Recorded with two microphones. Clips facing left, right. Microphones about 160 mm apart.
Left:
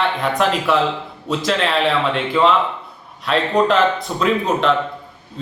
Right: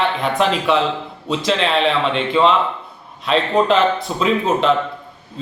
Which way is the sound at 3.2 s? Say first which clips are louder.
Even; centre (ahead or behind).